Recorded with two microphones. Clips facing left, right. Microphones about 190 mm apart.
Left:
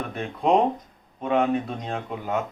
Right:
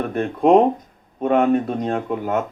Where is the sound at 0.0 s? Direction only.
50° right (ahead or behind).